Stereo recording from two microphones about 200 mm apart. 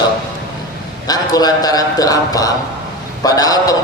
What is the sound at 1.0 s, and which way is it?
A man's voice, 20° left (ahead or behind).